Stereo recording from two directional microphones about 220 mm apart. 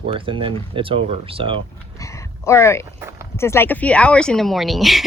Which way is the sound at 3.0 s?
10° right (ahead or behind).